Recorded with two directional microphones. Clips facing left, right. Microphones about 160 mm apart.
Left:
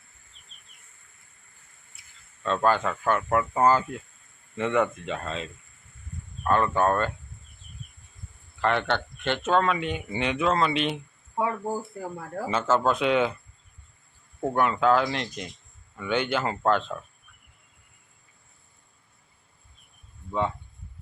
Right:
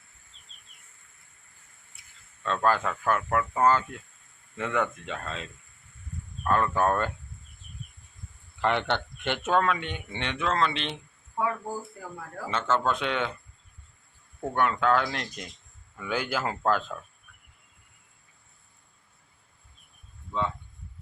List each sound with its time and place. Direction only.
2.4 s speech: 5° left (ahead or behind)
6.5 s speech: centre (ahead or behind)
8.6 s a man's voice: 15° right (ahead or behind)
9.6 s speech: 5° left (ahead or behind)
11.3 s speech: 25° left (ahead or behind)
12.5 s speech: 5° left (ahead or behind)
14.5 s speech: 5° left (ahead or behind)